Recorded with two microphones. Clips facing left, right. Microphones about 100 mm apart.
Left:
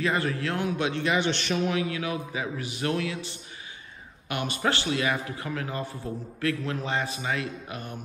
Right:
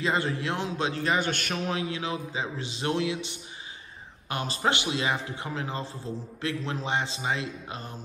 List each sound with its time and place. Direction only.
0.0 s a man's voice: 25° right (ahead or behind); by 1.6 s 45° right (ahead or behind)
1.7 s a man's voice: 25° right (ahead or behind)
4.3 s a man's voice: 30° right (ahead or behind)
4.6 s a man's voice: 20° right (ahead or behind)